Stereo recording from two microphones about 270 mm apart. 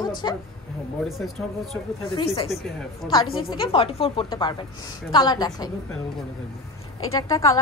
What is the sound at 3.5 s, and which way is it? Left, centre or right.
A woman's voice, centre.